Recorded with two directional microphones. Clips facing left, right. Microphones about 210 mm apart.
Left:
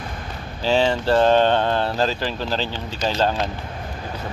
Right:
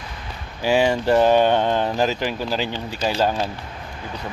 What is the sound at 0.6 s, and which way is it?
Speech, 10° right (ahead or behind).